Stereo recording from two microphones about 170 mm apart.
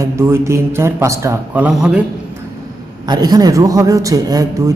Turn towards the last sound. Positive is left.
turn(degrees=-20)  # may be behind; listen again after turning